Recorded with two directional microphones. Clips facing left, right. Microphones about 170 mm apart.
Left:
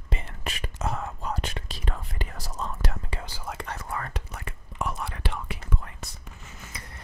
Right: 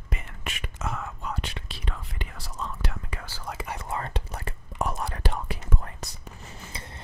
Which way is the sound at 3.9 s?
25° right (ahead or behind).